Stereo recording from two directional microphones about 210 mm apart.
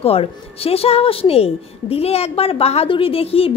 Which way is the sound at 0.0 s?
30° left (ahead or behind).